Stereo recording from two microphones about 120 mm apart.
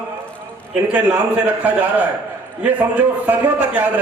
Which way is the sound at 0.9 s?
15° right (ahead or behind).